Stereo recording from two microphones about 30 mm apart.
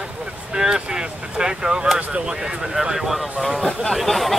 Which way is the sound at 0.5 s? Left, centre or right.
Right.